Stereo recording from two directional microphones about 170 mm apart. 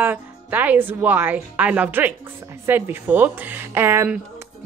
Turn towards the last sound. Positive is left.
turn(degrees=-15)  # may be behind; listen again after turning